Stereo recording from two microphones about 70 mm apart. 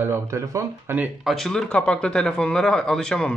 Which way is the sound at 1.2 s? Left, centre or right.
Centre.